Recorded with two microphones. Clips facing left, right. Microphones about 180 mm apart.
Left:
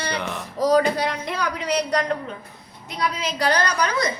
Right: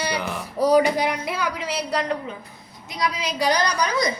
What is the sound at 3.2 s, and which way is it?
Speech, 10° right (ahead or behind).